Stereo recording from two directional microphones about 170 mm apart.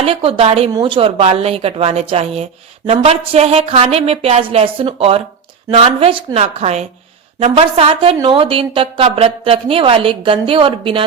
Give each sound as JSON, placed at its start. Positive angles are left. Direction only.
{"t": 0.0, "sound": "speech", "side_deg": -35}